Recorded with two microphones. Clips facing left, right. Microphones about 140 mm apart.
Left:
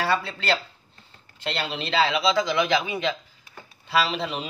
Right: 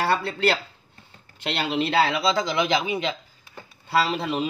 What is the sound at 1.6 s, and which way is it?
Speech, 55° right (ahead or behind).